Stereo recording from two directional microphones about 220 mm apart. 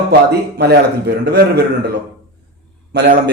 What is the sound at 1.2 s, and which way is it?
Speech, 45° right (ahead or behind).